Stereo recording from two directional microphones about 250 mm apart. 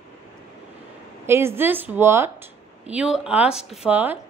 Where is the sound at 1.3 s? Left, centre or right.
Centre.